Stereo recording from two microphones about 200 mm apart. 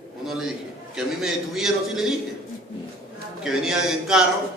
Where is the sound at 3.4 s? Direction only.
5° right (ahead or behind).